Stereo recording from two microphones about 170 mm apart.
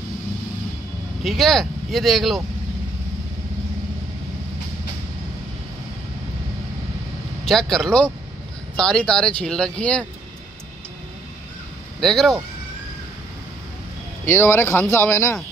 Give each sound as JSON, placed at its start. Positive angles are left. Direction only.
{"t": 1.2, "sound": "speech", "side_deg": 0}
{"t": 7.4, "sound": "speech", "side_deg": 0}
{"t": 12.0, "sound": "speech", "side_deg": 0}
{"t": 14.2, "sound": "speech", "side_deg": 15}